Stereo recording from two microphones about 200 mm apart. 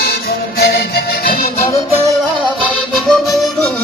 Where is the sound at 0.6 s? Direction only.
50° left (ahead or behind).